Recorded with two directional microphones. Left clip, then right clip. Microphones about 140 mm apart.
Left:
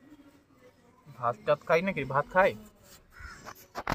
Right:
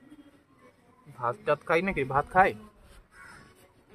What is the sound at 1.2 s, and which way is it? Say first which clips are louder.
A man's voice: even; 35° right (ahead or behind).